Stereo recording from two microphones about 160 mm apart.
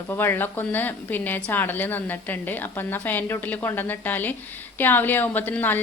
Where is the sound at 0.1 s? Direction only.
15° left (ahead or behind).